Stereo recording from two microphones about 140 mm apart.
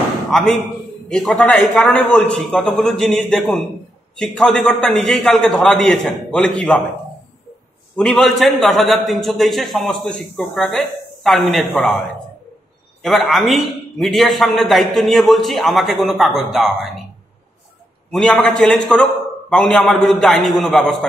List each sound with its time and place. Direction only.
0.3 s a man's voice: 5° left (ahead or behind)
7.9 s a man's voice: 5° left (ahead or behind)
13.0 s a man's voice: centre (ahead or behind)
18.1 s a man's voice: 5° left (ahead or behind)